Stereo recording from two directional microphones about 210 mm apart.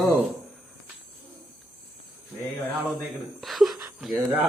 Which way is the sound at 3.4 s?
Centre (ahead or behind).